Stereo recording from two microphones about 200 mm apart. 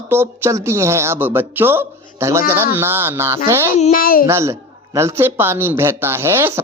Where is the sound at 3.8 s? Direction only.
40° left (ahead or behind).